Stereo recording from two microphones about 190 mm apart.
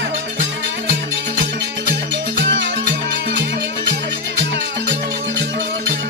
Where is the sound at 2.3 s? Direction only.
70° right (ahead or behind).